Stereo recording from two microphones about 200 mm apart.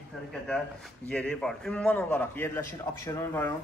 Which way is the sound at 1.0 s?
5° left (ahead or behind).